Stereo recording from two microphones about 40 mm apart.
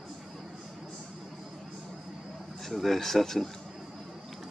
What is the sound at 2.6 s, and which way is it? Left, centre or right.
Speech, centre.